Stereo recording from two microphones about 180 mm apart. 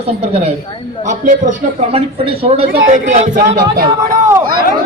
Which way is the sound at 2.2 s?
30° right (ahead or behind).